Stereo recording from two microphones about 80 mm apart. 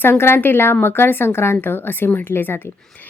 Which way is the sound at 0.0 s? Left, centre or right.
Left.